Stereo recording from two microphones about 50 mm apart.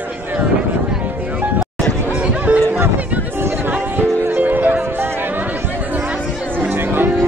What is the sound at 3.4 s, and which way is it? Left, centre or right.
Music, right.